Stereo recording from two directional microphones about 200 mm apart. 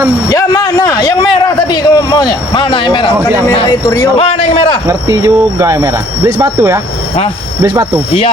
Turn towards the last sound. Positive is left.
turn(degrees=-15)  # may be behind; listen again after turning